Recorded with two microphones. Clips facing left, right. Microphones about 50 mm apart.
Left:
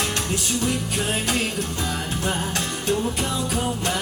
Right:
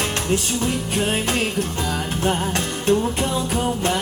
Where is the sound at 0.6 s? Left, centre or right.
Right.